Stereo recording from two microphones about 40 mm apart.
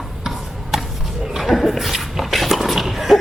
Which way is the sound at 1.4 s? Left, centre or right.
Centre.